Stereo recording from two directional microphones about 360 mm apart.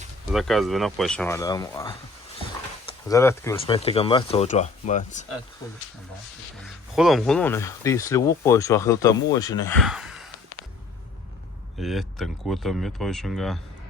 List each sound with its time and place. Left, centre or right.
0.3 s speech: centre
6.9 s speech: centre
11.8 s speech: centre